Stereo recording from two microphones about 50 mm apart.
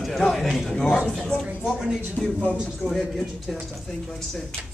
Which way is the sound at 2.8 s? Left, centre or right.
Right.